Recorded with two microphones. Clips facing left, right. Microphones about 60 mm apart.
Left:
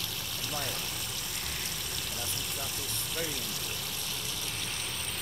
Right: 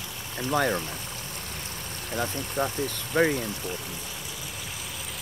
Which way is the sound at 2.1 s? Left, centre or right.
Right.